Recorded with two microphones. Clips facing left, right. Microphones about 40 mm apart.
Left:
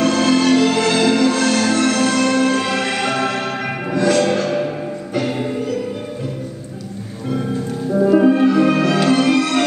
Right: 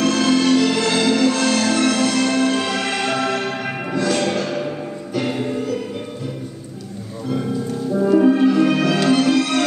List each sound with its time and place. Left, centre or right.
0.0 s music: centre
7.9 s music: centre
9.3 s music: left